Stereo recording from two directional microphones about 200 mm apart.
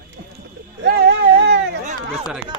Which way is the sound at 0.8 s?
60° right (ahead or behind).